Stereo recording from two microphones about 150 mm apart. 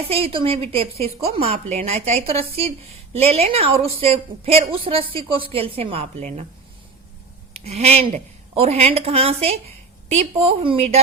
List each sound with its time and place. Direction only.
0.1 s a woman's voice: 40° right (ahead or behind)
7.5 s a woman's voice: 45° right (ahead or behind)